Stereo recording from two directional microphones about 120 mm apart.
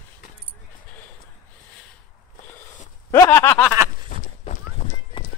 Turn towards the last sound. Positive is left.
turn(degrees=45)  # may be behind; listen again after turning